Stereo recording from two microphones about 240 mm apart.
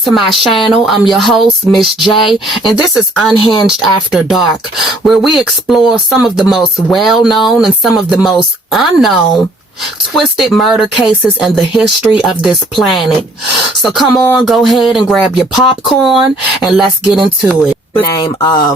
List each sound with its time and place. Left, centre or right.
0.0 s speech: centre
2.9 s speech: centre
18.1 s speech: centre